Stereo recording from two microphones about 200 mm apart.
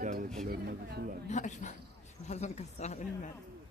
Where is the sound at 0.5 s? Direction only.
55° right (ahead or behind).